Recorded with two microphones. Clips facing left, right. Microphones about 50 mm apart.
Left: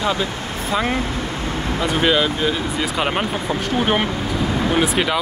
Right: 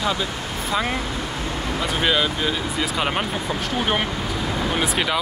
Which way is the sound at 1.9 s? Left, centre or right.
Centre.